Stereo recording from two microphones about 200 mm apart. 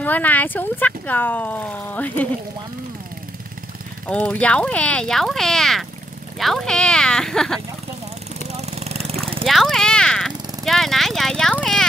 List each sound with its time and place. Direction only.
0.0 s speech: 10° left (ahead or behind)
4.1 s speech: 5° left (ahead or behind)
8.5 s vehicle: 35° right (ahead or behind)
9.5 s speech: centre (ahead or behind)